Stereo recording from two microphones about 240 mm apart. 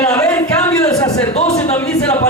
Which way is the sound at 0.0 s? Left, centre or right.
Centre.